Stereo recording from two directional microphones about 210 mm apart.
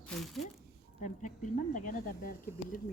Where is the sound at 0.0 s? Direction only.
Centre (ahead or behind).